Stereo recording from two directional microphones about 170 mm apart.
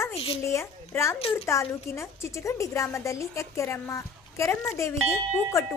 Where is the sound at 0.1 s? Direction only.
35° left (ahead or behind).